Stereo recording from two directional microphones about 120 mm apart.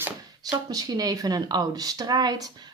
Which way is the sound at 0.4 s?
30° right (ahead or behind).